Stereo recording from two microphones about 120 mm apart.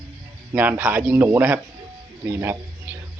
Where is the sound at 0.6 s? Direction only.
15° right (ahead or behind).